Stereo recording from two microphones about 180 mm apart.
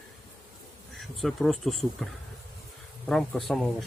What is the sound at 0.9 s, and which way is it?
Speech, centre (ahead or behind).